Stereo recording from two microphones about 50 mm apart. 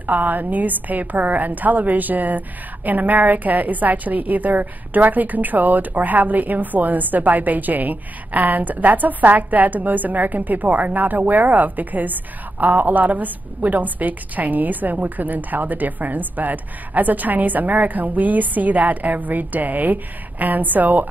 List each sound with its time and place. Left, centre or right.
0.0 s a woman's voice: right